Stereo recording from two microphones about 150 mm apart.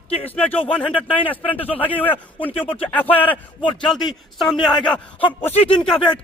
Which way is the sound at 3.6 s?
35° left (ahead or behind).